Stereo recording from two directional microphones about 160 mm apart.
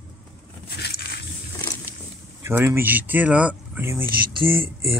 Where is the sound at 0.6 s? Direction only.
90° left.